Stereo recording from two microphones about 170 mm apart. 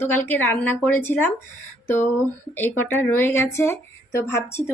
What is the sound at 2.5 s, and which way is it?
Speech, 10° left (ahead or behind).